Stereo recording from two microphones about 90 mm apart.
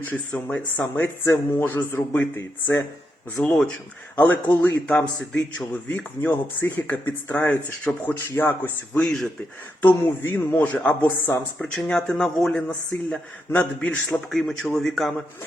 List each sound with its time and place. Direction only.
0.1 s speech: 15° left (ahead or behind)
0.9 s speech: 30° left (ahead or behind)
3.4 s speech: 20° left (ahead or behind)
9.0 s speech: 10° left (ahead or behind)
9.8 s speech: 25° left (ahead or behind)
14.3 s a man's voice: centre (ahead or behind)